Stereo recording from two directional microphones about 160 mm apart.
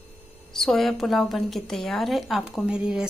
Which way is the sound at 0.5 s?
Centre (ahead or behind).